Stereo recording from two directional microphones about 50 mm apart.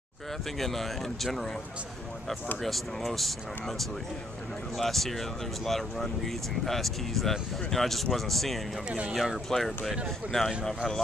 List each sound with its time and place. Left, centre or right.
0.5 s speech: centre
2.6 s speech: centre
8.8 s speech: right
9.1 s speech: centre